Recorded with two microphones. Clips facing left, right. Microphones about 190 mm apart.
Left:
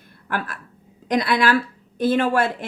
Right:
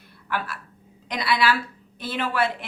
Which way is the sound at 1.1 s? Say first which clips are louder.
Left 4 dB; 45° left (ahead or behind).